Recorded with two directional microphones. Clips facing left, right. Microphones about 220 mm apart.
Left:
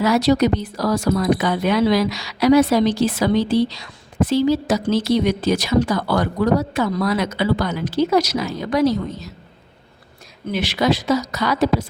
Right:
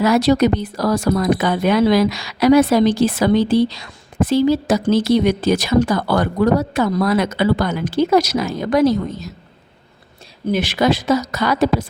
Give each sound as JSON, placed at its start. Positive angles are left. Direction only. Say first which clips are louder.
{"t": 0.0, "sound": "speech", "louder": "right 2 dB", "side_deg": -50}
{"t": 10.5, "sound": "speech", "louder": "right 2 dB", "side_deg": -50}